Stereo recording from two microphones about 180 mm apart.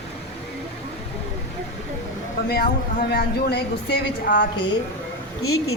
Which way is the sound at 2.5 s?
60° left (ahead or behind).